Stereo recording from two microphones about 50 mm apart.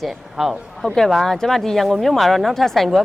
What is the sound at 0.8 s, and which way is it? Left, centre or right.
A woman's voice, centre.